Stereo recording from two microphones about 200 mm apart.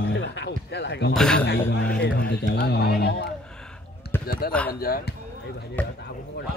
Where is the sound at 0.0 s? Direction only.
60° left (ahead or behind).